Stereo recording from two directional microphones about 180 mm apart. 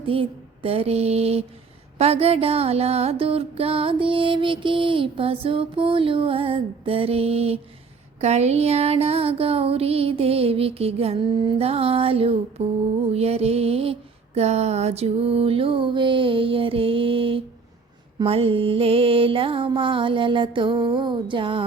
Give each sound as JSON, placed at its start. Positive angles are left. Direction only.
{"t": 0.0, "sound": "music", "side_deg": -30}
{"t": 18.2, "sound": "mantra", "side_deg": -30}